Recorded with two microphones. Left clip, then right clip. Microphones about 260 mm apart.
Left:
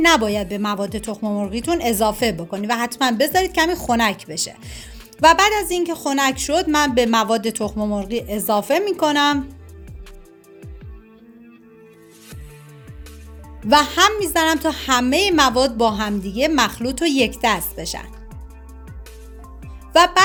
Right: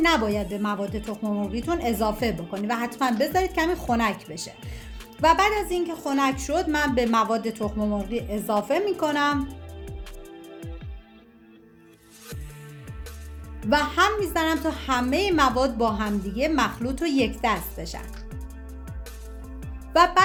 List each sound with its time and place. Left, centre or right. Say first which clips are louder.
0.0 s a woman's voice: left 6 dB; left
13.7 s a woman's voice: left 7 dB; left
19.9 s a woman's voice: left 5 dB; left